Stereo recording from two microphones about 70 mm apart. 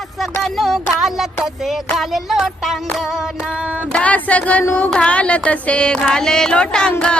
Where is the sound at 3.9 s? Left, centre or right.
Left.